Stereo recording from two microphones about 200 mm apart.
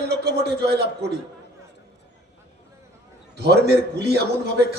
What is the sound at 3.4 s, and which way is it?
A man's voice, 55° right (ahead or behind).